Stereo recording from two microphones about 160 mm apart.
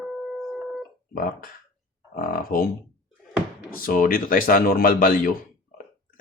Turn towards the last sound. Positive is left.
turn(degrees=65)  # may be behind; listen again after turning